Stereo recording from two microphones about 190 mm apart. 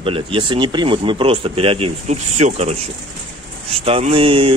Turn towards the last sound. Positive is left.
turn(degrees=-30)  # may be behind; listen again after turning